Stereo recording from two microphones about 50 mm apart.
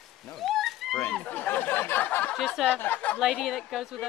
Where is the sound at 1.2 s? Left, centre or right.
Left.